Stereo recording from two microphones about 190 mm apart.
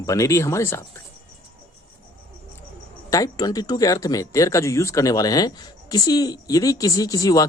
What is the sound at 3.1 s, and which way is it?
Speech, 20° left (ahead or behind).